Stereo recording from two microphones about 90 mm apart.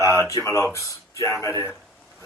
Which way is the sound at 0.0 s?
35° left (ahead or behind).